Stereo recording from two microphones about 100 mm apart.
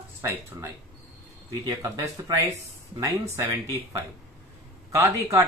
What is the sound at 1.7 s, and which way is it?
Speech, 35° right (ahead or behind).